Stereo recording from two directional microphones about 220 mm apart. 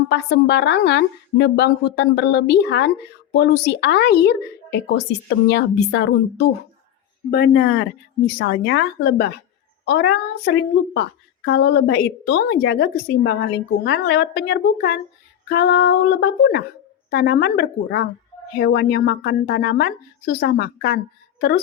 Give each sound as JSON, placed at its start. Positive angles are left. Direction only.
{"t": 0.1, "sound": "speech", "side_deg": 50}